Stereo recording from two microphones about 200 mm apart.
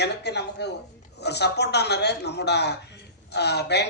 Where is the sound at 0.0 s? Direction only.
55° left (ahead or behind).